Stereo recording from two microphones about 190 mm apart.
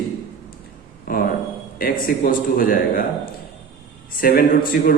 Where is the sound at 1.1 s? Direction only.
50° left (ahead or behind).